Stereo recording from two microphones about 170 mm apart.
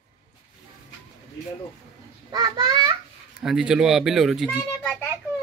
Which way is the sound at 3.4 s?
5° right (ahead or behind).